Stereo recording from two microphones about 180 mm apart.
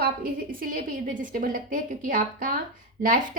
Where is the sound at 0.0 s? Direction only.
50° right (ahead or behind).